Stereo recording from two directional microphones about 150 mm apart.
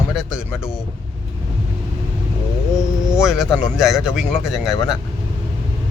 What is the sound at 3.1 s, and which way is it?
Speech, 5° right (ahead or behind).